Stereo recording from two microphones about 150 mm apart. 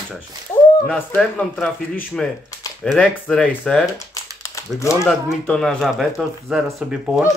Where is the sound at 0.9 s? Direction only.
10° left (ahead or behind).